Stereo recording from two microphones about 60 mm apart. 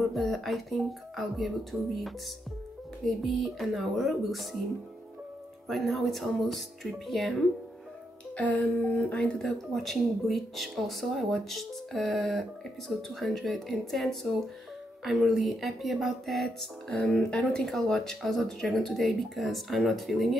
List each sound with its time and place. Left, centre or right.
0.1 s speech: centre
5.7 s speech: centre
8.4 s a sound: left
9.4 s speech: centre
16.8 s speech: centre